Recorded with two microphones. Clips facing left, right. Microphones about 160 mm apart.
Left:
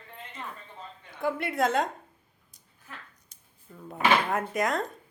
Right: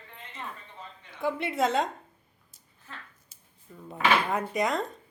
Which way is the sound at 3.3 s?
5° right (ahead or behind).